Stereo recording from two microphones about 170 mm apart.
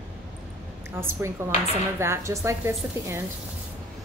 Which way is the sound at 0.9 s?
15° right (ahead or behind).